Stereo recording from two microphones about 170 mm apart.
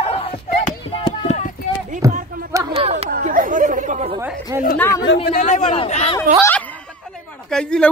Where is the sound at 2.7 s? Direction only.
35° right (ahead or behind).